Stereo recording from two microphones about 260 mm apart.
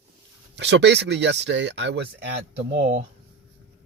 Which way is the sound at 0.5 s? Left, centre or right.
Right.